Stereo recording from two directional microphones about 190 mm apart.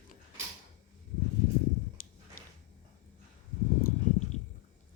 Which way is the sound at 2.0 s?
50° left (ahead or behind).